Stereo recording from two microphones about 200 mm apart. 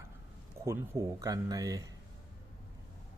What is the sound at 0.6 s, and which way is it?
Speech, 15° right (ahead or behind).